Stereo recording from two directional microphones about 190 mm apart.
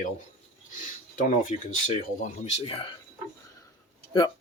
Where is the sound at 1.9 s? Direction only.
40° left (ahead or behind).